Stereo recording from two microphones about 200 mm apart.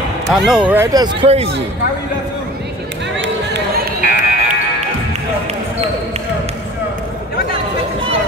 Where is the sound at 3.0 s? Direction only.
65° right (ahead or behind).